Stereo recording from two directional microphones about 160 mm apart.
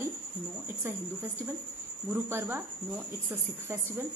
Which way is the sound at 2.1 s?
15° right (ahead or behind).